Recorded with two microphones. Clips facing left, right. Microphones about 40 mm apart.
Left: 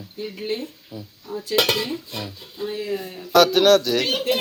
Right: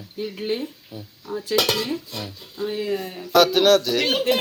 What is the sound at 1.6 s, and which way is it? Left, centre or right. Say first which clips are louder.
Dishes: left 1 dB; left.